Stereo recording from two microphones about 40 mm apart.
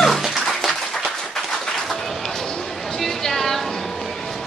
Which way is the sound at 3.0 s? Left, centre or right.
Centre.